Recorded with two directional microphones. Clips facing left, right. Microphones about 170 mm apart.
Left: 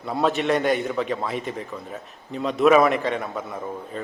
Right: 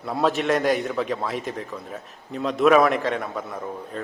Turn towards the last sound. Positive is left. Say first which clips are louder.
# even
turn(degrees=0)  # may be behind; listen again after turning